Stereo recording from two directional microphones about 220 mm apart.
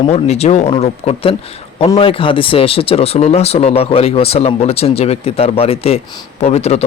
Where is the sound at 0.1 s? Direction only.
30° left (ahead or behind).